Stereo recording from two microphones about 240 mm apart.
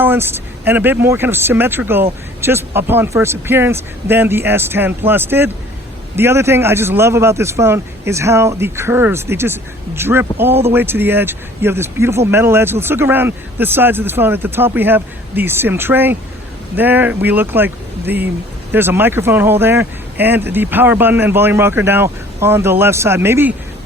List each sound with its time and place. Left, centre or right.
0.0 s speech: centre